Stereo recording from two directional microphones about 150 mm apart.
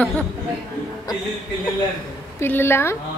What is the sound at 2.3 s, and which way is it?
Speech, 15° left (ahead or behind).